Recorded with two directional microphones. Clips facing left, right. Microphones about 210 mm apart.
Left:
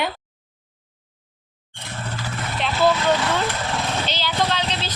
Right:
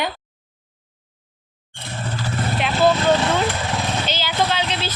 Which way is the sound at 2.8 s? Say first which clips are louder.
Right 2 dB; 25° right (ahead or behind).